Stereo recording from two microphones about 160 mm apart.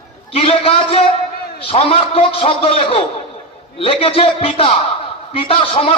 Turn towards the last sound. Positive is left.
turn(degrees=35)  # may be behind; listen again after turning